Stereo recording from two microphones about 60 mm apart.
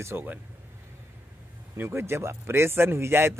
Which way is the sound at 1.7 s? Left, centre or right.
Right.